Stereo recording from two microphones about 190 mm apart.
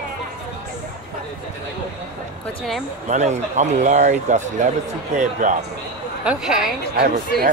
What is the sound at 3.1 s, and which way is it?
Speech, 40° right (ahead or behind).